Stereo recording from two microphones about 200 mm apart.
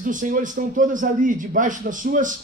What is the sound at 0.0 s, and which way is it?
A man's voice, 40° right (ahead or behind).